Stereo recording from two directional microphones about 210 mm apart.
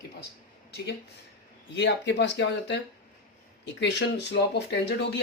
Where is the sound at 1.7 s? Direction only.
55° left (ahead or behind).